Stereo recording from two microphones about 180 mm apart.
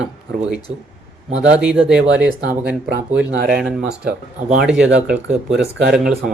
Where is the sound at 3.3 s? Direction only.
65° right (ahead or behind).